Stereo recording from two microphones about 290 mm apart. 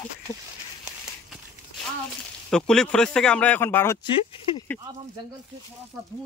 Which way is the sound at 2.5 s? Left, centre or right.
Centre.